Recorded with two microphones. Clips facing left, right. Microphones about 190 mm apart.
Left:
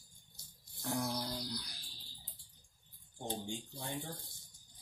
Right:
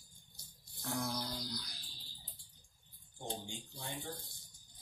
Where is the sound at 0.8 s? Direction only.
20° left (ahead or behind).